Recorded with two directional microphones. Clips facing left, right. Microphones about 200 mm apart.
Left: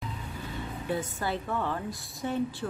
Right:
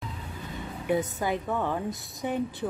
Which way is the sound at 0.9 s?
20° right (ahead or behind).